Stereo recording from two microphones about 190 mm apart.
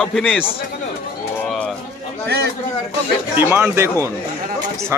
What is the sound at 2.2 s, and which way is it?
Speech, 55° right (ahead or behind).